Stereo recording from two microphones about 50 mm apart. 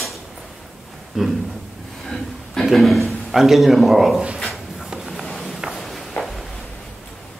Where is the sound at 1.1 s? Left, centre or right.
Centre.